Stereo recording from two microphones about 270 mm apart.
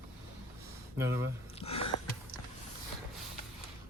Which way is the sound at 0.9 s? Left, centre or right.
Centre.